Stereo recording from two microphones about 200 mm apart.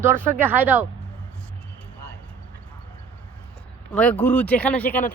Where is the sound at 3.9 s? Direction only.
5° left (ahead or behind).